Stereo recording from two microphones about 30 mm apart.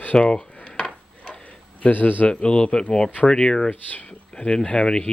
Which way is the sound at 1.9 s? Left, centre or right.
Left.